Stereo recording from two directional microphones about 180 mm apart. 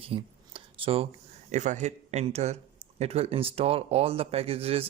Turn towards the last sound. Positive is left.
turn(degrees=-30)  # may be behind; listen again after turning